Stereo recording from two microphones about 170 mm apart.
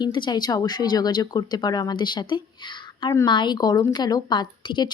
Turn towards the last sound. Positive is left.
turn(degrees=25)  # may be behind; listen again after turning